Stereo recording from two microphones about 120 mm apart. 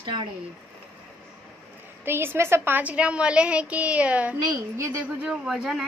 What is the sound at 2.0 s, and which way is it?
A woman's voice, 20° right (ahead or behind).